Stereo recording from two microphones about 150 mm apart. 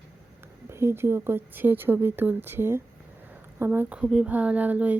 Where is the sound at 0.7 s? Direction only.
15° right (ahead or behind).